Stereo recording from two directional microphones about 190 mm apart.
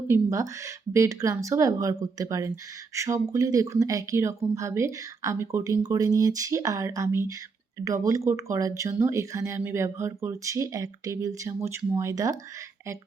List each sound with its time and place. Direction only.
0.1 s speech: 15° right (ahead or behind)